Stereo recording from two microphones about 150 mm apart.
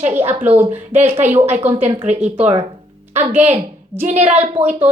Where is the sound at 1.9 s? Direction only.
40° right (ahead or behind).